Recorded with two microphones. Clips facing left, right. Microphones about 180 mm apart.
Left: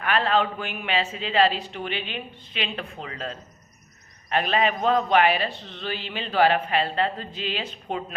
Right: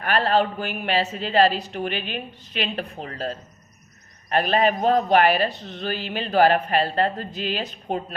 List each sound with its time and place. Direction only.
0.0 s a man's voice: 40° right (ahead or behind)